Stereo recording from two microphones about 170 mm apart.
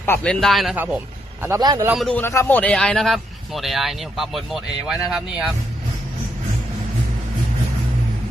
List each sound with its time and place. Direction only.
0.0 s speech: 10° left (ahead or behind)
1.4 s speech: 20° right (ahead or behind)
1.9 s speech: centre (ahead or behind)
2.2 s speech: 15° left (ahead or behind); by 5.5 s 5° right (ahead or behind)